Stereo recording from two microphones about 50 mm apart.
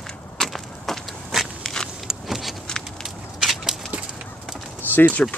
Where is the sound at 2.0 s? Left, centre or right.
Centre.